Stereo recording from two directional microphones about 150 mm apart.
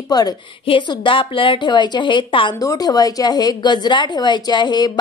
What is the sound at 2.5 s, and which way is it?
A woman's voice, 25° left (ahead or behind).